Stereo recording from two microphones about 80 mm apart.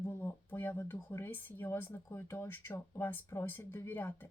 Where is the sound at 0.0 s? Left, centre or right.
Left.